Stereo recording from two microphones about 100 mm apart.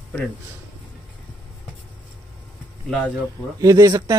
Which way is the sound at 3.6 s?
35° right (ahead or behind).